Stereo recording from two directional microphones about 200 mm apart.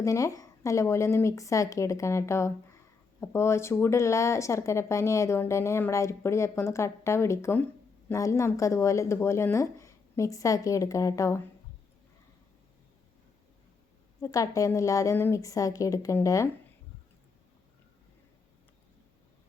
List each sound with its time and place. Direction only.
0.0 s speech: 15° left (ahead or behind)
14.2 s speech: 15° left (ahead or behind)